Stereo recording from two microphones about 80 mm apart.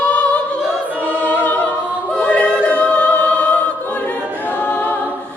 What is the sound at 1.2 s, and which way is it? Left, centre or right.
Music, left.